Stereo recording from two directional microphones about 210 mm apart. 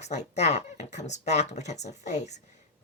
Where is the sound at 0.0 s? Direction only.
35° left (ahead or behind).